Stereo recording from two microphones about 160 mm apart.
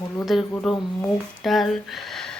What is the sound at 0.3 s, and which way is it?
Speech, centre (ahead or behind).